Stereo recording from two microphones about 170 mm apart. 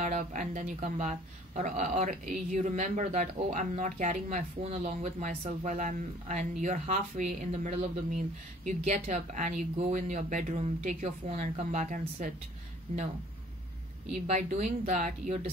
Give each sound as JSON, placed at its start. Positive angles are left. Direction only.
{"t": 0.0, "sound": "speech", "side_deg": -45}
{"t": 14.1, "sound": "speech", "side_deg": -45}